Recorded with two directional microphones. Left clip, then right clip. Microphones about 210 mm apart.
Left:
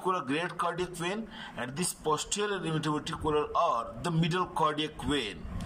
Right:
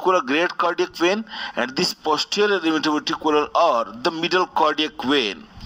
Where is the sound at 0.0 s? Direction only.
50° right (ahead or behind).